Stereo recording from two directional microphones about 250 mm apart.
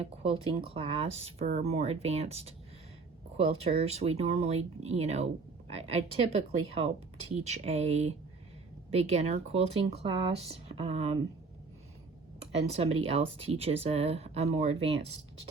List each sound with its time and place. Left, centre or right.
0.0 s speech: right
12.4 s speech: right